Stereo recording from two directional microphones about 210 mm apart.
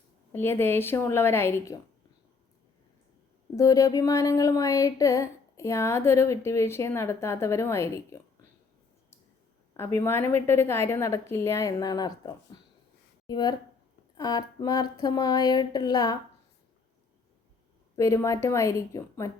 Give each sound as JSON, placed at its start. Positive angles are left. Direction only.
{"t": 0.3, "sound": "speech", "side_deg": 10}
{"t": 3.5, "sound": "speech", "side_deg": 15}
{"t": 10.0, "sound": "speech", "side_deg": 10}
{"t": 17.9, "sound": "speech", "side_deg": 15}